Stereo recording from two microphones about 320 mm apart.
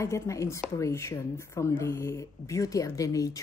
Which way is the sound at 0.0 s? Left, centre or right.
Centre.